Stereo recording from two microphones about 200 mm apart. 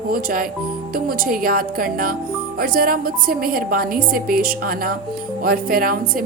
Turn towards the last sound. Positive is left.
turn(degrees=-45)  # may be behind; listen again after turning